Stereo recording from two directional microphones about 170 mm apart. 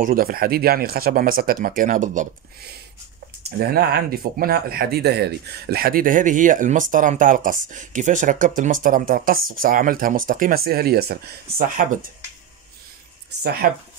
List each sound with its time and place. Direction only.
0.0 s speech: 60° right (ahead or behind)
3.4 s speech: 70° right (ahead or behind); by 12.1 s 50° right (ahead or behind)
13.4 s speech: 65° right (ahead or behind)